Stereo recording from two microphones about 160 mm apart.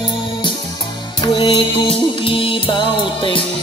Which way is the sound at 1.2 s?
30° left (ahead or behind).